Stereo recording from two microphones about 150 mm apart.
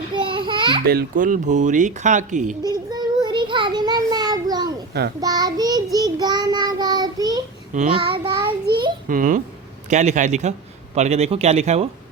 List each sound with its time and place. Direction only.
0.3 s babbling: 30° right (ahead or behind)
0.9 s speech: 75° right (ahead or behind); by 2.6 s 55° right (ahead or behind)
2.6 s child singing: 30° right (ahead or behind)
7.7 s speech: 55° right (ahead or behind)
8.1 s a child's voice: 30° right (ahead or behind)
9.0 s speech: 65° right (ahead or behind)
9.9 s a man's voice: 50° right (ahead or behind)